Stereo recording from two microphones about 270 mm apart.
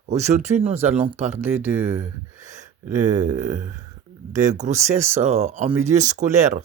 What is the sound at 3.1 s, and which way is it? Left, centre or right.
Speech, right.